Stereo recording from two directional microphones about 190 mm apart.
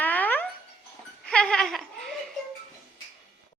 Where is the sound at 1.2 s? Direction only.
5° left (ahead or behind).